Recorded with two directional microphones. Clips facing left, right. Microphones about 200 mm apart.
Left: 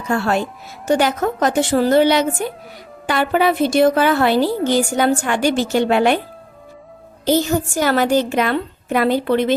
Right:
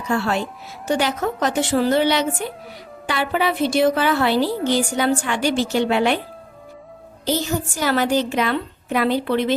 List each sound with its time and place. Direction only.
0.1 s a woman's voice: 50° left (ahead or behind)
7.3 s a woman's voice: 50° left (ahead or behind)